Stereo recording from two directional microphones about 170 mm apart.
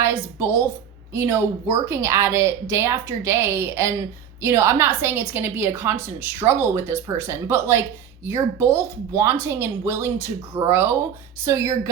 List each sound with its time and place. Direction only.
0.0 s a woman's voice: 15° right (ahead or behind)